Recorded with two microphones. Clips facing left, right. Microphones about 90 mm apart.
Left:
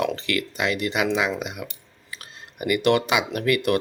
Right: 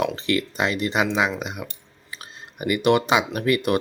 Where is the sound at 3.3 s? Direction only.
25° right (ahead or behind).